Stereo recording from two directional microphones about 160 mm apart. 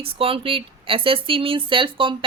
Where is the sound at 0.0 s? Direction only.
35° right (ahead or behind).